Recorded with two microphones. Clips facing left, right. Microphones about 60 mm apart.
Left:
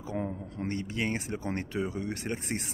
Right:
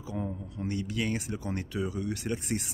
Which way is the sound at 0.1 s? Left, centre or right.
Left.